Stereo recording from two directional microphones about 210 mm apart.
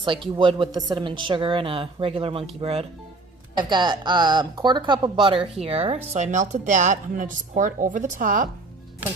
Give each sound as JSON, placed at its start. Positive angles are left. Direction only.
{"t": 0.0, "sound": "a woman's voice", "side_deg": -25}